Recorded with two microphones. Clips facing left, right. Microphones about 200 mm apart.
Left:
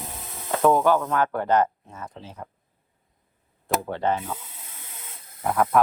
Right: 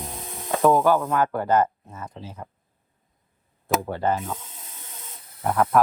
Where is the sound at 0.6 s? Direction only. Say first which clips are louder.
Right 1 dB; centre (ahead or behind).